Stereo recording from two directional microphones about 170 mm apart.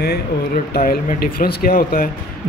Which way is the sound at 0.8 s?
60° left (ahead or behind).